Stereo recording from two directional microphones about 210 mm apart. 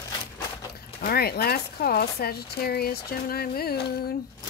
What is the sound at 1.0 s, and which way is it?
Speech, 50° left (ahead or behind).